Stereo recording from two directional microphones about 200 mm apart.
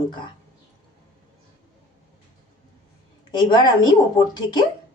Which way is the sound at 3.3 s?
20° left (ahead or behind).